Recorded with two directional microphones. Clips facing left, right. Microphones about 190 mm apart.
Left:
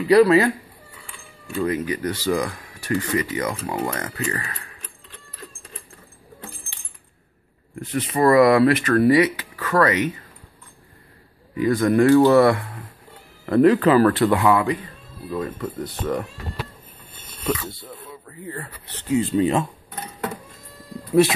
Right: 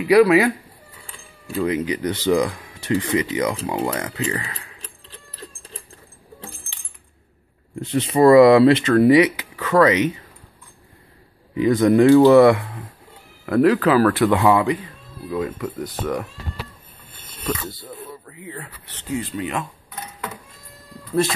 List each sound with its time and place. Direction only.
0.0 s speech: 10° right (ahead or behind)
1.6 s speech: 20° right (ahead or behind)
4.7 s keys jangling: 35° right (ahead or behind)
7.8 s speech: 30° right (ahead or behind)
11.5 s speech: 20° right (ahead or behind)
13.5 s speech: centre (ahead or behind)
14.4 s speech: 20° right (ahead or behind)
15.2 s speech: 10° right (ahead or behind)
17.8 s a sound: centre (ahead or behind)
18.9 s speech: 25° left (ahead or behind)